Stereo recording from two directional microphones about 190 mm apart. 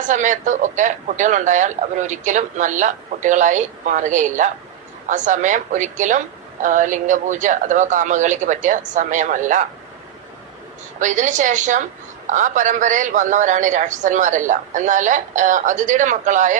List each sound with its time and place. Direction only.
0.1 s a woman's voice: 40° right (ahead or behind)
11.0 s a woman's voice: 40° right (ahead or behind)